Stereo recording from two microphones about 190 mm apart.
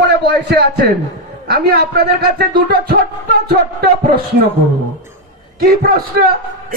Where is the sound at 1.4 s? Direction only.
55° right (ahead or behind).